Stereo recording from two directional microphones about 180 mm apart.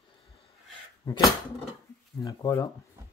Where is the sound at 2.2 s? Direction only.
15° left (ahead or behind).